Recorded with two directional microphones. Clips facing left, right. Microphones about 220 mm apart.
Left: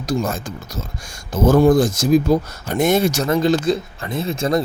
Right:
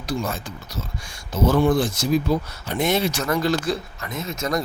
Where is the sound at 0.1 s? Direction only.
45° left (ahead or behind).